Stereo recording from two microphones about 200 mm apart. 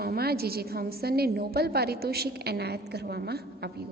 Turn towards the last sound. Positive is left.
turn(degrees=-55)  # may be behind; listen again after turning